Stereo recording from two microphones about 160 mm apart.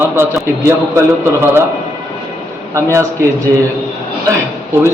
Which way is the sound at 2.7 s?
15° right (ahead or behind).